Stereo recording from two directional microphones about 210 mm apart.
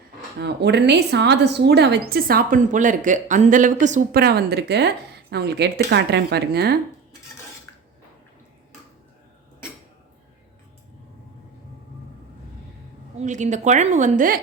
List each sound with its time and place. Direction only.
0.3 s a woman's voice: 55° right (ahead or behind)
13.1 s a woman's voice: 35° right (ahead or behind)